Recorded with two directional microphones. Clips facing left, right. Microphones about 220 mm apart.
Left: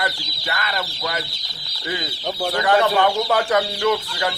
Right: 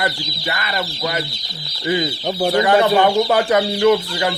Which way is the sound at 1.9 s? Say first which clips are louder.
Right 7 dB; 20° right (ahead or behind).